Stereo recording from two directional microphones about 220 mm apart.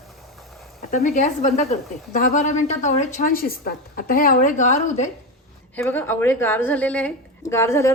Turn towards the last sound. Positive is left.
turn(degrees=10)  # may be behind; listen again after turning